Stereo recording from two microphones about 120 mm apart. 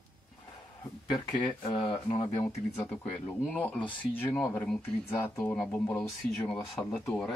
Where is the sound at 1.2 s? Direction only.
45° left (ahead or behind).